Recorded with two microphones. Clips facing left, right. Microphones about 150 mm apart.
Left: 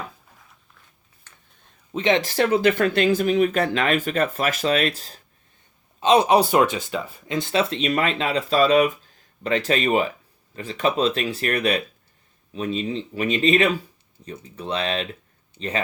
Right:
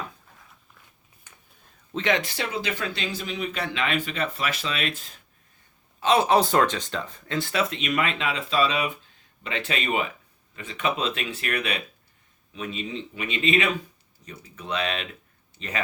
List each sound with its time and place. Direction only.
1.3 s a sound: 15° right (ahead or behind)
1.9 s speech: 20° left (ahead or behind)
2.2 s speech: 40° left (ahead or behind)
2.5 s speech: 55° left (ahead or behind); by 5.2 s 35° left (ahead or behind)
6.0 s speech: 20° left (ahead or behind)